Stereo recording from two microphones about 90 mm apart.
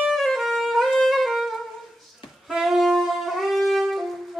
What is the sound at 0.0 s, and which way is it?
Music, centre (ahead or behind).